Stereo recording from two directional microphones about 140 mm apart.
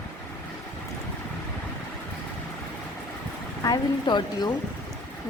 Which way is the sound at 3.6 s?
30° left (ahead or behind).